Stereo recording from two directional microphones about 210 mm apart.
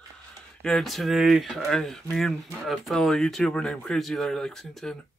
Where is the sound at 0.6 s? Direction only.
Centre (ahead or behind).